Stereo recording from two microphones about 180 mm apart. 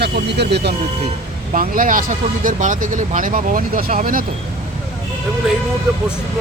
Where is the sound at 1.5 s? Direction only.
50° right (ahead or behind).